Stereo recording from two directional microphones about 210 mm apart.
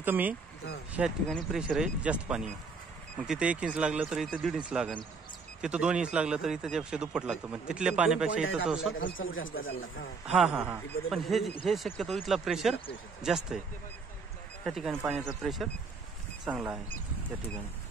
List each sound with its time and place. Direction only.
0.0 s speech: 10° right (ahead or behind)
9.2 s speech: 70° left (ahead or behind)
10.3 s speech: 5° right (ahead or behind)
14.6 s speech: centre (ahead or behind)